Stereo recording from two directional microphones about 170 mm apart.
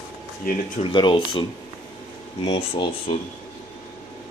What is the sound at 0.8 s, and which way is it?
Speech, 30° left (ahead or behind).